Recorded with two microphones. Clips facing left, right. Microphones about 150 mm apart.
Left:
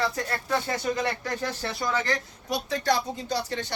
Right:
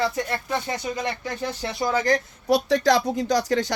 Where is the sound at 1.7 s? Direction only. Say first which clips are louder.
Right 6 dB; 30° right (ahead or behind).